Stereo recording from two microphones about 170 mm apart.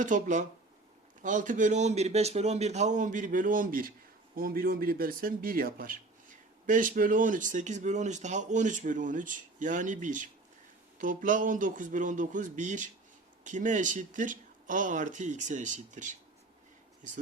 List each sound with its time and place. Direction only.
0.0 s speech: 45° right (ahead or behind)